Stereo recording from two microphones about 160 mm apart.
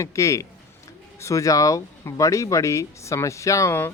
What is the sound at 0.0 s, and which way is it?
Speech, 20° left (ahead or behind).